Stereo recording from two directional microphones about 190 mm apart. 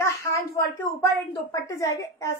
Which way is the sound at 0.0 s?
15° left (ahead or behind).